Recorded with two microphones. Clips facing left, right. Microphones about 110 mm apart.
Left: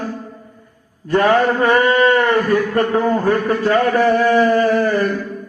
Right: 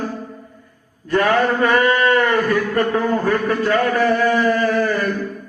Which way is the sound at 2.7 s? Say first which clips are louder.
Left 2 dB; 35° left (ahead or behind).